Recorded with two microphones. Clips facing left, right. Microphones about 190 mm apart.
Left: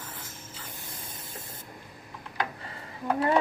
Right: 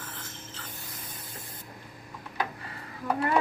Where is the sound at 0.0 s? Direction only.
10° left (ahead or behind).